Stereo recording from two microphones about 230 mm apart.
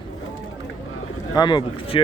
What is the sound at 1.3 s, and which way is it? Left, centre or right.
Speech, centre.